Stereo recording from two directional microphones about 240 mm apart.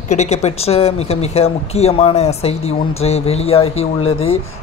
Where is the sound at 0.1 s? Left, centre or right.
Left.